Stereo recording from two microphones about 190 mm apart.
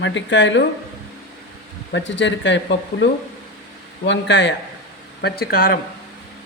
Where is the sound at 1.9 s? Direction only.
70° left (ahead or behind).